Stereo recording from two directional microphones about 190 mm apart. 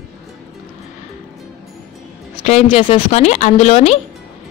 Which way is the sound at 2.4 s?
30° left (ahead or behind).